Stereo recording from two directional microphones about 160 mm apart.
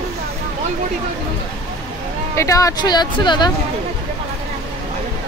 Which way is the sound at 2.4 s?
20° left (ahead or behind).